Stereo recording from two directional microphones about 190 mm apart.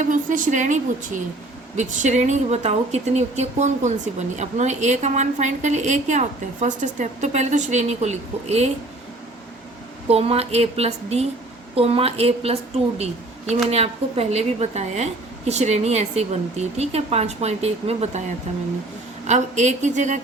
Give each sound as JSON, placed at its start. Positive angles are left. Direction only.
{"t": 0.0, "sound": "a woman's voice", "side_deg": -45}
{"t": 10.1, "sound": "a woman's voice", "side_deg": -30}
{"t": 19.3, "sound": "a woman's voice", "side_deg": -40}